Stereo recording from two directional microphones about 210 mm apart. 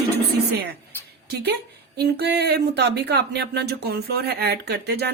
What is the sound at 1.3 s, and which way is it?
Speech, 55° right (ahead or behind).